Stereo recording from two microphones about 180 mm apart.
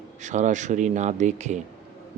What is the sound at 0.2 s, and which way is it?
Speech, 40° right (ahead or behind).